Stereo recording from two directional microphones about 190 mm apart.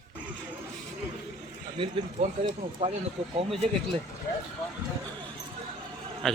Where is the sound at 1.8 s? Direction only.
30° right (ahead or behind).